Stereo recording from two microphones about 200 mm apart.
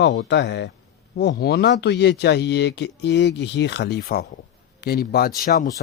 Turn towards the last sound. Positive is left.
turn(degrees=45)  # may be behind; listen again after turning